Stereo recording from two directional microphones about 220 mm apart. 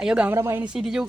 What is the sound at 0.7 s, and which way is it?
Speech, centre (ahead or behind).